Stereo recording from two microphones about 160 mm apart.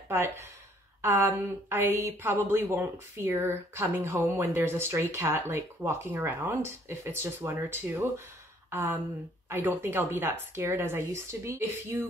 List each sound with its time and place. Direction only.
0.1 s speech: 15° right (ahead or behind)
8.6 s a sound: 15° right (ahead or behind)
9.5 s speech: 15° right (ahead or behind)